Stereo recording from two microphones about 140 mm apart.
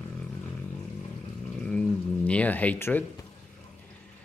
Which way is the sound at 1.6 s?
5° left (ahead or behind).